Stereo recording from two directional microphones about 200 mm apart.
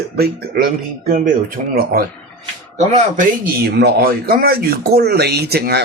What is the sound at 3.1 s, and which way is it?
Speech, 50° right (ahead or behind).